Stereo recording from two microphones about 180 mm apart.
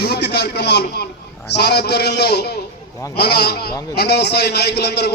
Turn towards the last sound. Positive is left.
turn(degrees=65)  # may be behind; listen again after turning